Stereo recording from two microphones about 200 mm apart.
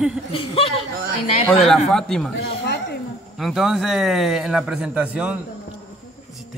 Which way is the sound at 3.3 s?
Centre (ahead or behind).